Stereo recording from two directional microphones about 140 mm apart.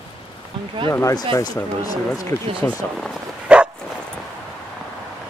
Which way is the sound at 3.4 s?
5° right (ahead or behind).